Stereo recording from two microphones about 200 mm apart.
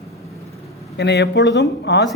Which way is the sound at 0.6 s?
Centre (ahead or behind).